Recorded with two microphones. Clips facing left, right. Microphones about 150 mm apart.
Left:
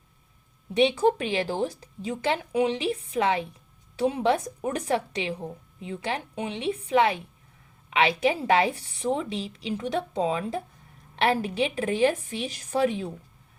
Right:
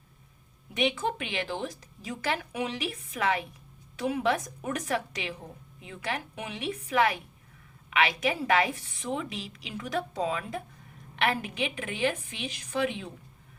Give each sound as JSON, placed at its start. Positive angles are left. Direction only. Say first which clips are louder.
{"t": 0.7, "sound": "a woman's voice", "louder": "left 8 dB", "side_deg": 30}